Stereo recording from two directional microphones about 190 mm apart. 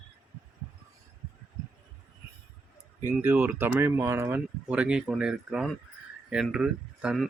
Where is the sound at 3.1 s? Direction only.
10° right (ahead or behind).